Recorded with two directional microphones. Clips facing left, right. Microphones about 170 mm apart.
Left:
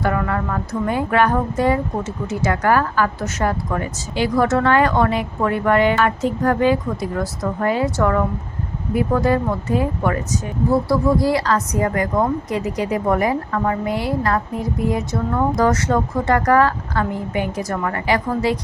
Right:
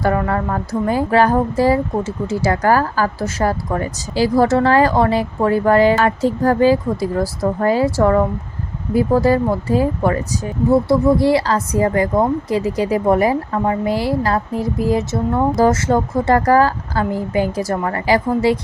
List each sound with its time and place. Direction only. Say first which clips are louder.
0.0 s a woman's voice: right 3 dB; 35° right (ahead or behind)